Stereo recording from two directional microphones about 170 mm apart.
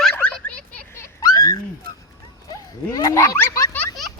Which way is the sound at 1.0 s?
20° left (ahead or behind).